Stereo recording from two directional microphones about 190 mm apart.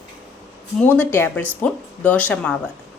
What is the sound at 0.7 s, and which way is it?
Speech, 10° left (ahead or behind).